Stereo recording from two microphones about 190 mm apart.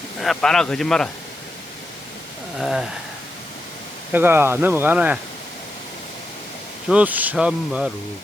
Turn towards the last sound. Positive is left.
turn(degrees=-5)  # may be behind; listen again after turning